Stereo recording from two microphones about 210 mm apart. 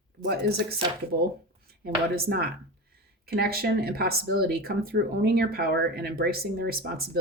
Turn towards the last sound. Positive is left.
turn(degrees=-45)  # may be behind; listen again after turning